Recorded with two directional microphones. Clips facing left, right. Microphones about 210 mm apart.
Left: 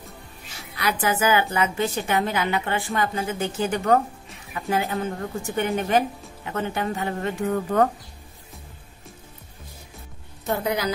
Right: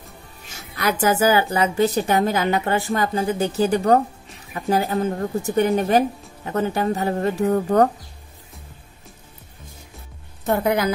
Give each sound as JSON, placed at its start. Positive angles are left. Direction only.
{"t": 0.7, "sound": "a woman's voice", "side_deg": -45}
{"t": 10.4, "sound": "a woman's voice", "side_deg": -55}